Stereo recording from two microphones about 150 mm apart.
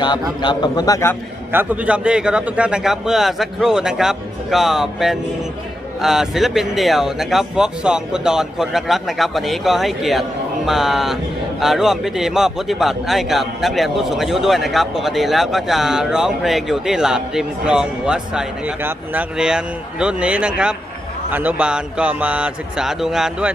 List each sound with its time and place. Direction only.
0.0 s a man's voice: 30° left (ahead or behind)
1.5 s a man's voice: 10° right (ahead or behind)